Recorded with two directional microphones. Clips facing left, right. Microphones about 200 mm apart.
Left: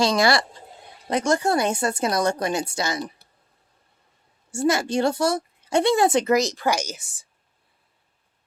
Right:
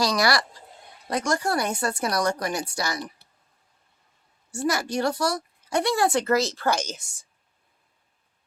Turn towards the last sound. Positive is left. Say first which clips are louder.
# left 1 dB
turn(degrees=5)  # may be behind; listen again after turning